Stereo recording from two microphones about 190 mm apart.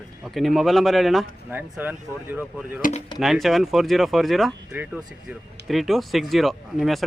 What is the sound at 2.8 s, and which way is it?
Speech, 45° left (ahead or behind).